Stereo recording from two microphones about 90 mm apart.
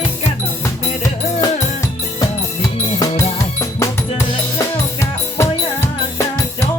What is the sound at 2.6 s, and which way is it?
Music, 35° left (ahead or behind).